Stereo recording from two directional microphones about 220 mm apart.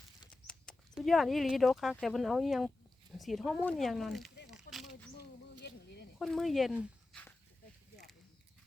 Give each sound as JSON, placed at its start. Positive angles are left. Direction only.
{"t": 0.3, "sound": "speech", "side_deg": 5}
{"t": 4.5, "sound": "a sound", "side_deg": 0}
{"t": 6.1, "sound": "speech", "side_deg": 0}